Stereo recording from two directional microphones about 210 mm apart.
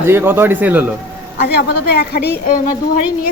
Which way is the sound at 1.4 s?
50° left (ahead or behind).